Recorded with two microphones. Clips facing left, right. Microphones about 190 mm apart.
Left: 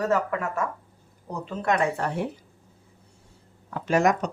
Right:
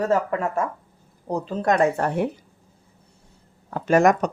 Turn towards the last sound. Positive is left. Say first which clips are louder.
# right 5 dB
turn(degrees=-50)  # may be behind; listen again after turning